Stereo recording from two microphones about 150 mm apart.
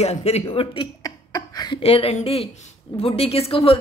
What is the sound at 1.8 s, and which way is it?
Speech, 40° left (ahead or behind).